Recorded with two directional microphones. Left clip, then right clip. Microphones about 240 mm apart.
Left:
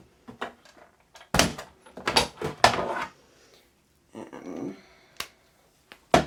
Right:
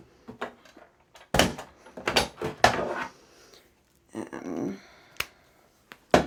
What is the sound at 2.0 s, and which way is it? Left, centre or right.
Door, centre.